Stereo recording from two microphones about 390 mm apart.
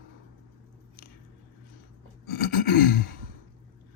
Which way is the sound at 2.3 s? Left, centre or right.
Left.